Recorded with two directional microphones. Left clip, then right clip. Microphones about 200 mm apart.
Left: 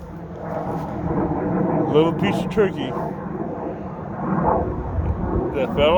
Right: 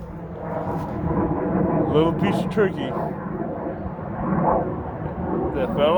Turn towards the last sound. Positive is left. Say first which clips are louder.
# left 2 dB
turn(degrees=15)  # may be behind; listen again after turning